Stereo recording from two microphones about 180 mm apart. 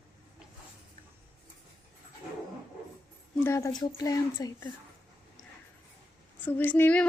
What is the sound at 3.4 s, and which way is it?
Speech, 15° left (ahead or behind).